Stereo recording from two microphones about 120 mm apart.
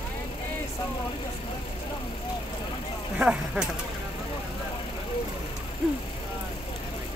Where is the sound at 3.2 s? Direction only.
10° right (ahead or behind).